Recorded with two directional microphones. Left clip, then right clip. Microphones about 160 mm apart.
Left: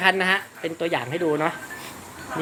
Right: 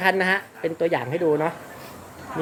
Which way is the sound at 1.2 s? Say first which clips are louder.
Right 1 dB; 10° right (ahead or behind).